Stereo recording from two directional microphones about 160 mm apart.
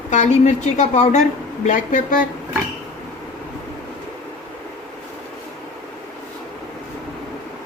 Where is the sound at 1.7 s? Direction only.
55° left (ahead or behind).